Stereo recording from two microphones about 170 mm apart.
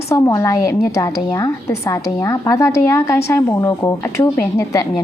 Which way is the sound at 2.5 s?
15° left (ahead or behind).